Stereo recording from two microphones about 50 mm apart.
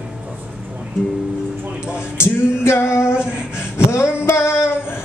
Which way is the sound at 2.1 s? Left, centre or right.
Left.